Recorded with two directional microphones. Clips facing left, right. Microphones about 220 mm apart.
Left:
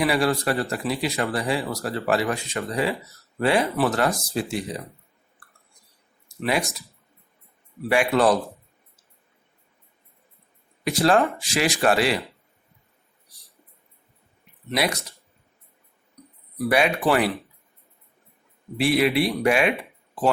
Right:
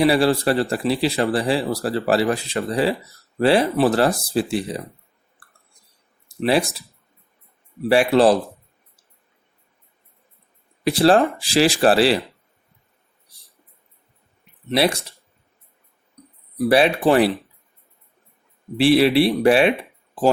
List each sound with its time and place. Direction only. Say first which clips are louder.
0.0 s speech: right 5 dB; 30° right (ahead or behind)
6.2 s a sound: right 6 dB; 30° right (ahead or behind)
7.9 s speech: right 5 dB; 30° right (ahead or behind)
11.0 s speech: right 4 dB; 30° right (ahead or behind)
14.7 s speech: right 6 dB; 30° right (ahead or behind)
16.2 s a sound: right 1 dB; 25° right (ahead or behind)
16.6 s speech: right 5 dB; 30° right (ahead or behind)
18.8 s speech: right 6 dB; 30° right (ahead or behind)